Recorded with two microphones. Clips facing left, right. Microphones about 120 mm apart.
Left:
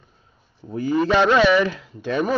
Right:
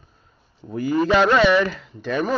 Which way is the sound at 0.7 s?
Centre (ahead or behind).